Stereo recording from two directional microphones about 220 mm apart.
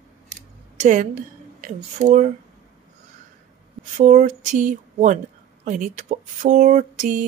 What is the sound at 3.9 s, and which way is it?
Speech, 30° right (ahead or behind).